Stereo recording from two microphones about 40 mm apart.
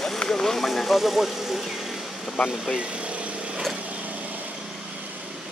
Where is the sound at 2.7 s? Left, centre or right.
Right.